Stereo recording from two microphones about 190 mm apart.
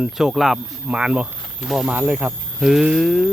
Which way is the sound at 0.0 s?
5° right (ahead or behind).